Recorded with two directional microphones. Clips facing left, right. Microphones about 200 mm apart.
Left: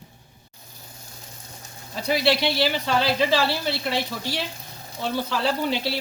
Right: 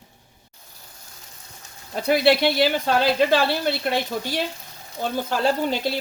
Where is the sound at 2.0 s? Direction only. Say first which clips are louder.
Right 4 dB; 55° right (ahead or behind).